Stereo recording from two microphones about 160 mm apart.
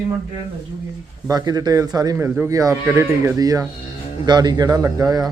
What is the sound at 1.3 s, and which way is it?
A man's voice, 25° right (ahead or behind).